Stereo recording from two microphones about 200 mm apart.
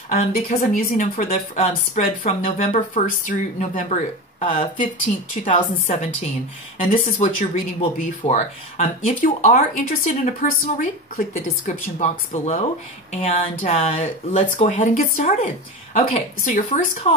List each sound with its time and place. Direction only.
0.7 s speech: 40° left (ahead or behind)